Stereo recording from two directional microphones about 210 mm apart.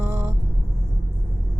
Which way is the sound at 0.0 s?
10° right (ahead or behind).